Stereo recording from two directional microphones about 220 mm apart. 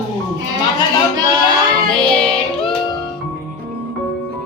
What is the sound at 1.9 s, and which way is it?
Child singing, 5° left (ahead or behind).